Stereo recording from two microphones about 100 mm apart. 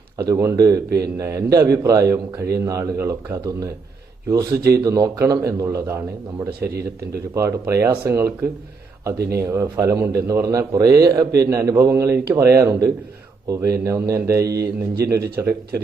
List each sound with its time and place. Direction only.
0.2 s a man's voice: 35° right (ahead or behind)
4.3 s a man's voice: 35° right (ahead or behind)